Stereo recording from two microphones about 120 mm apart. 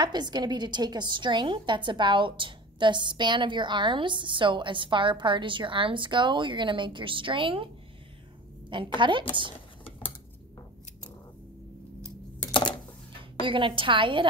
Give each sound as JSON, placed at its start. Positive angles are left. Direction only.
{"t": 0.0, "sound": "a woman's voice", "side_deg": -35}
{"t": 12.5, "sound": "a sound", "side_deg": 40}
{"t": 13.4, "sound": "a woman's voice", "side_deg": -45}